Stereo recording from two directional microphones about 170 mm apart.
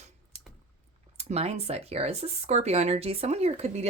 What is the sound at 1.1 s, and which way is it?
Speech, 35° right (ahead or behind).